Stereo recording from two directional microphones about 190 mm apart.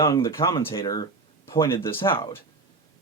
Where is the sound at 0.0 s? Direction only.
15° left (ahead or behind).